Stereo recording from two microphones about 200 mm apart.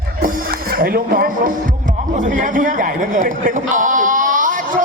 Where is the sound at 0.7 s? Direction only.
50° right (ahead or behind).